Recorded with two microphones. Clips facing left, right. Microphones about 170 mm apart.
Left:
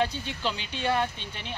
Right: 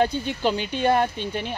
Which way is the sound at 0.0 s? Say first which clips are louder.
Right 7 dB; 45° right (ahead or behind).